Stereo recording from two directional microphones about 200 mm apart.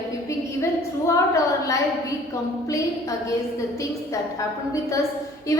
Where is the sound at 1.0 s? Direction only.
15° left (ahead or behind).